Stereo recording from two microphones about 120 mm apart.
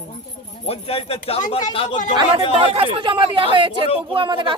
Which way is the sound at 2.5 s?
50° right (ahead or behind).